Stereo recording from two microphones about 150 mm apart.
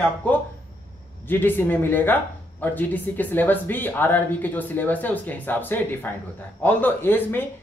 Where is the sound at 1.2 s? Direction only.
15° left (ahead or behind).